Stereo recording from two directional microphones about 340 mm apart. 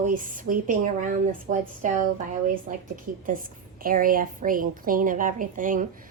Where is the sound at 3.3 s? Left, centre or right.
Right.